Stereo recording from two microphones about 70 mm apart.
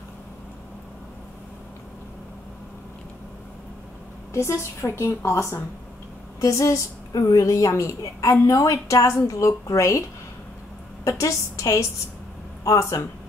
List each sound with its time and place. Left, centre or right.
4.3 s a woman's voice: left
11.1 s a woman's voice: left